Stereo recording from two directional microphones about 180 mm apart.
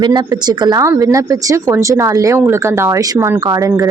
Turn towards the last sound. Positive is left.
turn(degrees=-20)  # may be behind; listen again after turning